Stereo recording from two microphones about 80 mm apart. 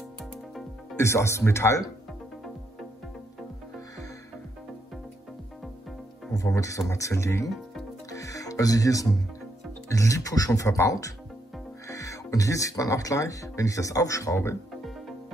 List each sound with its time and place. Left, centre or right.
0.2 s music: centre
0.9 s speech: left
6.3 s speech: left
8.1 s music: left
9.8 s speech: left